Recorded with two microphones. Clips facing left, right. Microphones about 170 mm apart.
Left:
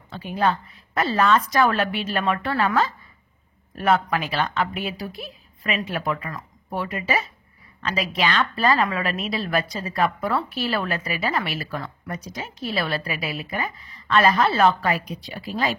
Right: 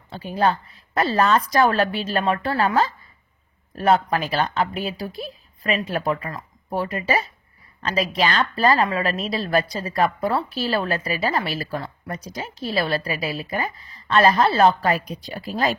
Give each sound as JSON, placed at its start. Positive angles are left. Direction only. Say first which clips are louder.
{"t": 0.1, "sound": "a woman's voice", "louder": "right 2 dB", "side_deg": -35}